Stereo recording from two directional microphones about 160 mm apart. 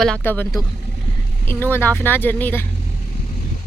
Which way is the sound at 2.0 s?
10° left (ahead or behind).